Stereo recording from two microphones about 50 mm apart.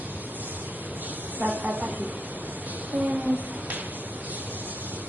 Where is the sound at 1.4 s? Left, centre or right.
Right.